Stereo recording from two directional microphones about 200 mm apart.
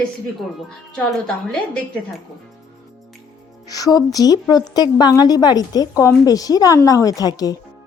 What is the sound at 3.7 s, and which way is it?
A woman's voice, 20° left (ahead or behind).